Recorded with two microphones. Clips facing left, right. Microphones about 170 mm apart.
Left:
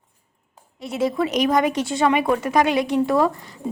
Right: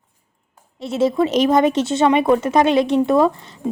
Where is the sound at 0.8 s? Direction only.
25° right (ahead or behind).